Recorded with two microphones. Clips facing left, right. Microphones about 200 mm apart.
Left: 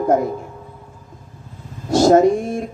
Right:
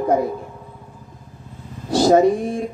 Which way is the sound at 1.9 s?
45° left (ahead or behind).